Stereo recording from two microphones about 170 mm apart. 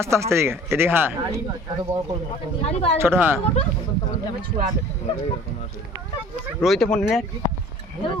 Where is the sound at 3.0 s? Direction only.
15° right (ahead or behind).